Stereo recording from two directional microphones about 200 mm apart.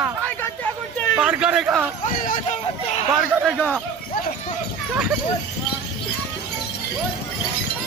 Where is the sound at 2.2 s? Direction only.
40° left (ahead or behind).